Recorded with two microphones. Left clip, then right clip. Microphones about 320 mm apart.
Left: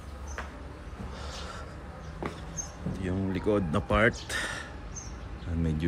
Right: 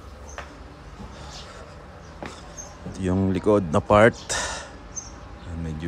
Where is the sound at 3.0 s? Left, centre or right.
Centre.